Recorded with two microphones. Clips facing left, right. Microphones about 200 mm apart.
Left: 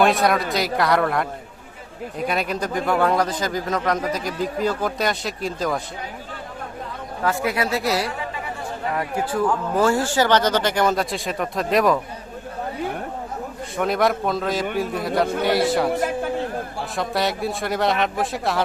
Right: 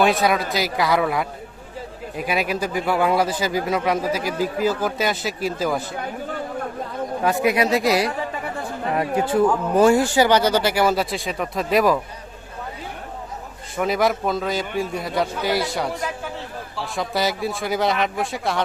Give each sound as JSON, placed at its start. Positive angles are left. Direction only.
{"t": 0.0, "sound": "a man's voice", "side_deg": 0}
{"t": 7.4, "sound": "a man's voice", "side_deg": -15}
{"t": 13.7, "sound": "a man's voice", "side_deg": 0}
{"t": 15.9, "sound": "a man's voice", "side_deg": 55}
{"t": 17.0, "sound": "a man's voice", "side_deg": 0}